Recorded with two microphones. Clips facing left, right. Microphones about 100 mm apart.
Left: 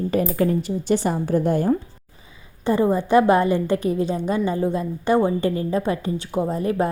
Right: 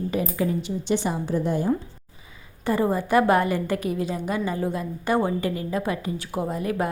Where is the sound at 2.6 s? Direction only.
20° left (ahead or behind).